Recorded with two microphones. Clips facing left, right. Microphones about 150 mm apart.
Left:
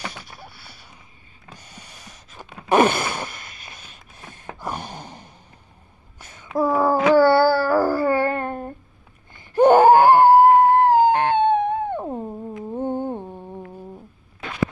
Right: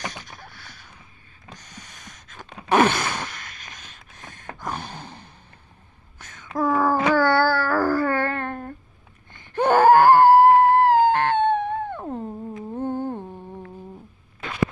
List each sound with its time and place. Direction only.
0.1 s a sound: 10° left (ahead or behind)
6.1 s dog: 10° left (ahead or behind)
9.3 s screaming: 10° left (ahead or behind)
12.7 s music: 15° left (ahead or behind)